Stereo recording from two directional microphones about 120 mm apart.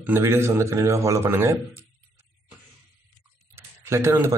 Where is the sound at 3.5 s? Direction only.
20° right (ahead or behind).